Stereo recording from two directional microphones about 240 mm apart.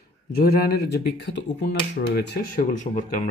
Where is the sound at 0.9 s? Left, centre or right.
Left.